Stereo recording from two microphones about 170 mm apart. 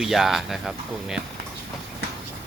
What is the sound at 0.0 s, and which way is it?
Speech, centre (ahead or behind).